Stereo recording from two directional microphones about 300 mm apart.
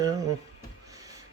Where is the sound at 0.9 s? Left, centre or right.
Centre.